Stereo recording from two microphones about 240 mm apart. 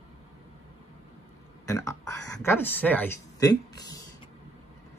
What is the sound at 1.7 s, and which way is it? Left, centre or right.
Speech, centre.